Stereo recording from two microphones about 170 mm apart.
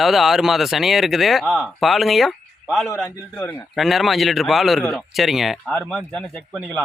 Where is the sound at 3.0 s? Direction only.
10° left (ahead or behind).